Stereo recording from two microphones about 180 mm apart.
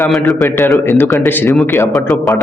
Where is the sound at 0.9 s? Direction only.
15° left (ahead or behind).